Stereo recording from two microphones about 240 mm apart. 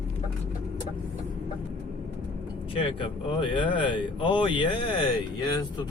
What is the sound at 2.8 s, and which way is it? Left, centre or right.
A man's voice, left.